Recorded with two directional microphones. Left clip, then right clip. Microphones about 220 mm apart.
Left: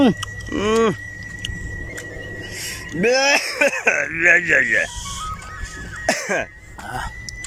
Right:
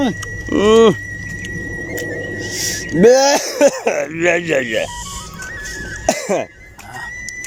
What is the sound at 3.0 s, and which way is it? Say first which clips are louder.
Speech: right 6 dB; 30° right (ahead or behind).